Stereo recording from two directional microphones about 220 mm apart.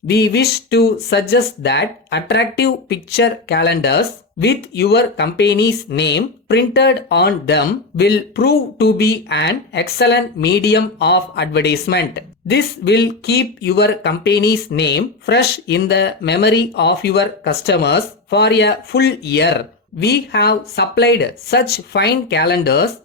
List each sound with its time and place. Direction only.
0.1 s speech: 50° left (ahead or behind)